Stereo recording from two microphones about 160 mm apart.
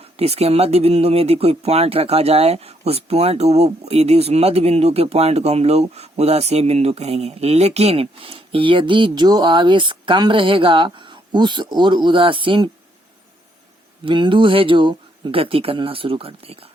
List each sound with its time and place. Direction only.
0.0 s speech: 40° right (ahead or behind)
14.0 s speech: 30° right (ahead or behind)